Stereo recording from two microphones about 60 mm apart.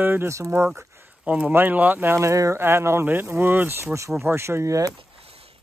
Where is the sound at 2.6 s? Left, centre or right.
Right.